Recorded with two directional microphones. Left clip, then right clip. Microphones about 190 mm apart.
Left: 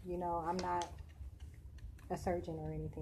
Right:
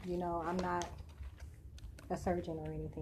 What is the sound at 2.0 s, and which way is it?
Speech, 10° right (ahead or behind).